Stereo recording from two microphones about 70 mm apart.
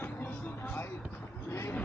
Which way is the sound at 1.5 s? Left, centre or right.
Left.